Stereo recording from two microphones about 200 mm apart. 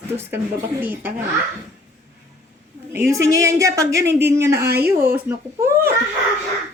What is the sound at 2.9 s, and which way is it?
Speech, 15° right (ahead or behind).